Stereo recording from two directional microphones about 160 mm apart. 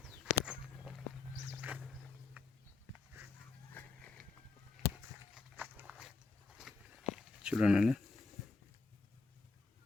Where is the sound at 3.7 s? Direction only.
10° left (ahead or behind).